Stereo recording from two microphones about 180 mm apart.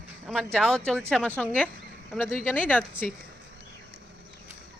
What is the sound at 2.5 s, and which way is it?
Speech, 10° left (ahead or behind).